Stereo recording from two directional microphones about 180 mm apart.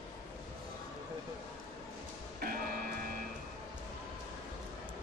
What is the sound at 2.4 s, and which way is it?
Music, 55° right (ahead or behind).